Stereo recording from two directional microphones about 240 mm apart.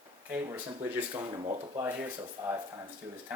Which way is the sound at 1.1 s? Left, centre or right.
Right.